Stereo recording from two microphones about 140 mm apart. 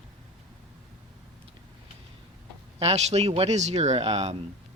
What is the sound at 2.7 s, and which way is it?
Speech, 50° right (ahead or behind).